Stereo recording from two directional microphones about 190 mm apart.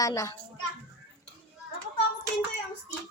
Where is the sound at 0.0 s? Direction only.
15° left (ahead or behind).